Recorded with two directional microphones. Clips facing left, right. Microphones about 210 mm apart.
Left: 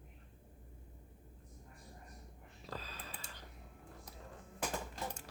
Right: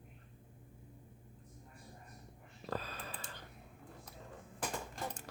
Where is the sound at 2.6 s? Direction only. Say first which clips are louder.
Right 6 dB; 55° right (ahead or behind).